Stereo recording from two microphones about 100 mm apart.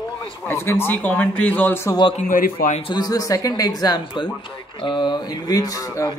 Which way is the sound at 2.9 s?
40° left (ahead or behind).